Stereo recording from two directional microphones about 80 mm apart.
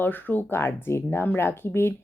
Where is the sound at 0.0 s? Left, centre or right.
Left.